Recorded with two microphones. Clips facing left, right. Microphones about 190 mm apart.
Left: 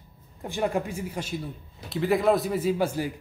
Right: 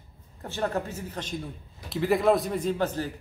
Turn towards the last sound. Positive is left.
turn(degrees=10)  # may be behind; listen again after turning